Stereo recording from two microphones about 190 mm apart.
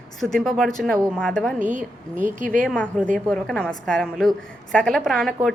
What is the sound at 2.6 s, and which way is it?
A woman's voice, 5° left (ahead or behind).